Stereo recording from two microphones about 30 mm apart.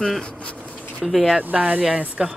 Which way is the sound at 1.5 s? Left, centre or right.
Right.